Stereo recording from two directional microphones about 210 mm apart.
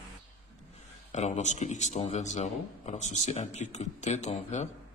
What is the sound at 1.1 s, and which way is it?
A man's voice, 35° left (ahead or behind).